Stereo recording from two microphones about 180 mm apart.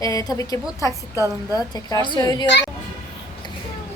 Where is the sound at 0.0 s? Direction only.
20° left (ahead or behind).